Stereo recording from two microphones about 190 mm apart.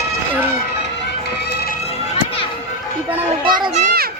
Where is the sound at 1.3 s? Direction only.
55° left (ahead or behind).